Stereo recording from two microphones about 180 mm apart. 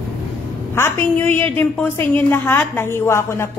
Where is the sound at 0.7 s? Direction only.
15° left (ahead or behind).